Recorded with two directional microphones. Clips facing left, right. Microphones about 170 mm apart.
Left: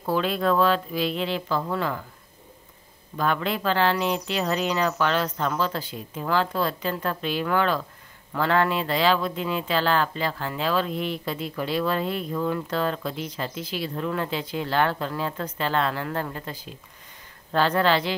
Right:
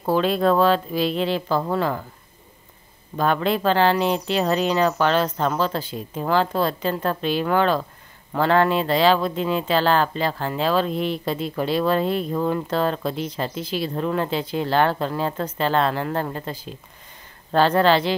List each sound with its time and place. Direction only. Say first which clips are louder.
0.0 s speech: right 5 dB; 30° right (ahead or behind)
3.2 s speech: right 5 dB; 35° right (ahead or behind)